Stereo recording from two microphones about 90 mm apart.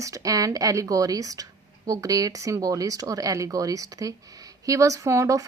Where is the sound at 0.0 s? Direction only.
40° right (ahead or behind).